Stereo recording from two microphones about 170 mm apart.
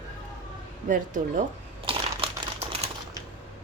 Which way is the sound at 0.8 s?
50° right (ahead or behind).